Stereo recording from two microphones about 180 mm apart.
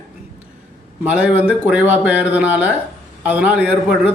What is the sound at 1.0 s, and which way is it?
Speech, 5° right (ahead or behind).